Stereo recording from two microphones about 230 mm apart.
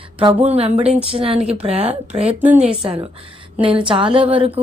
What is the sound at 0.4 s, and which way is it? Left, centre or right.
A woman's voice, right.